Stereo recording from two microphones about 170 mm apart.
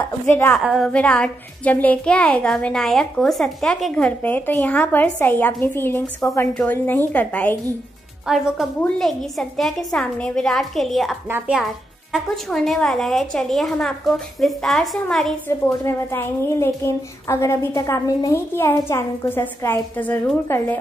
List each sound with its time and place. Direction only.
0.5 s a child's voice: centre (ahead or behind)
11.2 s speech: 10° right (ahead or behind)
15.6 s a child's voice: 15° left (ahead or behind)